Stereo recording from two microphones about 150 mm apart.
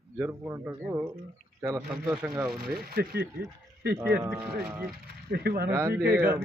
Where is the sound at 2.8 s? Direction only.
90° right.